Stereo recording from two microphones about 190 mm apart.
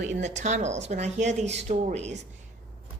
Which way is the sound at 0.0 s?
40° right (ahead or behind).